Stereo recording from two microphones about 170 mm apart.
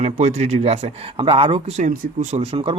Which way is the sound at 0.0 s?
45° right (ahead or behind).